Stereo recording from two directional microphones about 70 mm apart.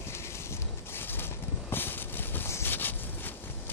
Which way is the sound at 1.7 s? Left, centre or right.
Left.